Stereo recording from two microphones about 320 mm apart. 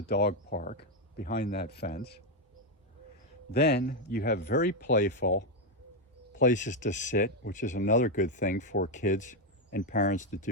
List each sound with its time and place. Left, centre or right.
0.1 s speech: left
3.5 s speech: left